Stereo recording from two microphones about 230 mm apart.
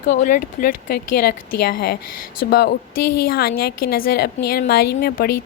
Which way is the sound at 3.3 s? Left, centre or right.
Left.